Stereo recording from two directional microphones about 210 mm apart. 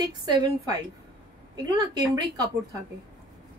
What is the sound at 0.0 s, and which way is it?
A woman's voice, 20° right (ahead or behind).